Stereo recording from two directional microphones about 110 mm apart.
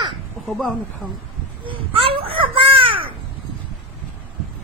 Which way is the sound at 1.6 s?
55° right (ahead or behind).